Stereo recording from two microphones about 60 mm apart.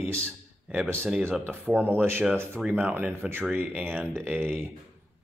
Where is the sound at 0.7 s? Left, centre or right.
Centre.